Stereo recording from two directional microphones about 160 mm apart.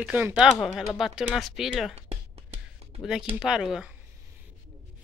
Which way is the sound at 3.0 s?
5° right (ahead or behind).